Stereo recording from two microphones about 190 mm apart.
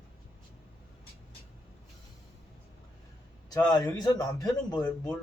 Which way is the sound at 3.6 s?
20° left (ahead or behind).